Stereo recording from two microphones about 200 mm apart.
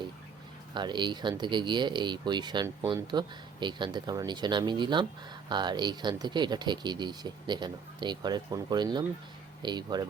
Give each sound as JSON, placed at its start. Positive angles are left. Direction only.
{"t": 0.7, "sound": "speech", "side_deg": -20}